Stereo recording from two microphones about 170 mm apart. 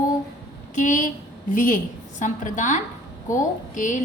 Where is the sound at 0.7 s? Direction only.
50° left (ahead or behind).